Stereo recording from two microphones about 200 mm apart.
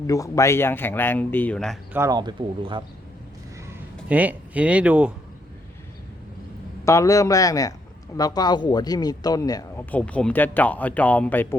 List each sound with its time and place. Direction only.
0.1 s speech: 15° left (ahead or behind)
1.9 s speech: 15° right (ahead or behind)
3.7 s speech: 10° right (ahead or behind)
6.8 s speech: 15° left (ahead or behind)
9.9 s speech: 5° left (ahead or behind)